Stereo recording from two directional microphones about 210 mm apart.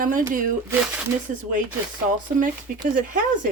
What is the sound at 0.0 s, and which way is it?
Speech, 40° right (ahead or behind).